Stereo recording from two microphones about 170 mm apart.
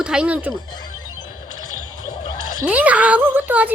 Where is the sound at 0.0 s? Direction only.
5° right (ahead or behind).